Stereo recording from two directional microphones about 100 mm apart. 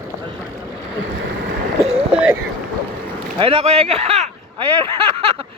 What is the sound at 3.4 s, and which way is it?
Speech, 70° right (ahead or behind).